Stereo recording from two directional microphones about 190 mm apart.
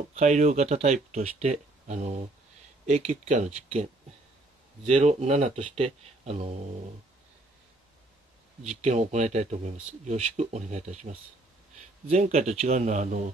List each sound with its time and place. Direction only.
0.1 s speech: 35° right (ahead or behind)
8.6 s speech: 40° right (ahead or behind)